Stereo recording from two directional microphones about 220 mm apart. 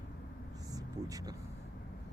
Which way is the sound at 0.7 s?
15° right (ahead or behind).